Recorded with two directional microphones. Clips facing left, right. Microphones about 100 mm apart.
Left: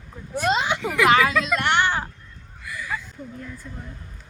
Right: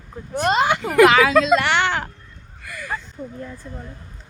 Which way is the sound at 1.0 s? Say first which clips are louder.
Right 5 dB; 90° right.